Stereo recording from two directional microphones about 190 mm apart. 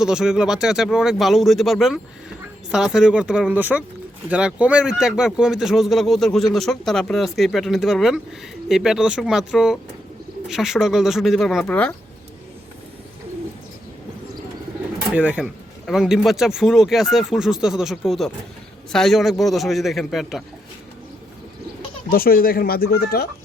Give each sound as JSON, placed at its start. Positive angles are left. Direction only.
{"t": 0.0, "sound": "speech", "side_deg": -5}
{"t": 15.1, "sound": "speech", "side_deg": -5}
{"t": 22.1, "sound": "speech", "side_deg": 50}